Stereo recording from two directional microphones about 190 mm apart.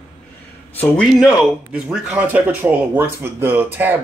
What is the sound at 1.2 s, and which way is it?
Speech, 5° right (ahead or behind).